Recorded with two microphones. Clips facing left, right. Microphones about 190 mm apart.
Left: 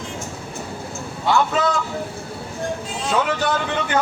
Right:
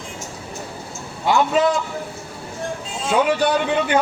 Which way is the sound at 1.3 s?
15° right (ahead or behind).